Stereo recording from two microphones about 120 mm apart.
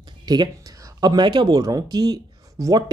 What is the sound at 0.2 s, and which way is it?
Speech, 35° right (ahead or behind).